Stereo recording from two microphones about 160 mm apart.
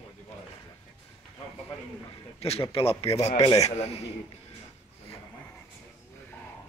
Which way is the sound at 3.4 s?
25° left (ahead or behind).